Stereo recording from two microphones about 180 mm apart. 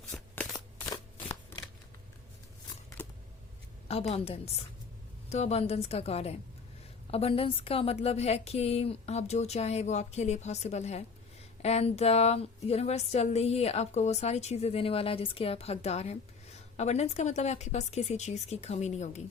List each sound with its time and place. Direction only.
0.1 s shuffling cards: 5° left (ahead or behind)
3.8 s a woman's voice: 35° left (ahead or behind)